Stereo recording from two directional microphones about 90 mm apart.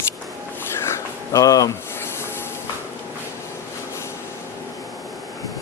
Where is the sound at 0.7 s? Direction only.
30° left (ahead or behind).